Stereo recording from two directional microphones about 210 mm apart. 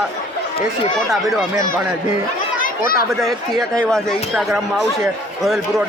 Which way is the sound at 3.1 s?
Centre (ahead or behind).